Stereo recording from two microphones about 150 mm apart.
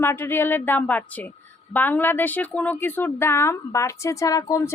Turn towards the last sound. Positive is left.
turn(degrees=25)  # may be behind; listen again after turning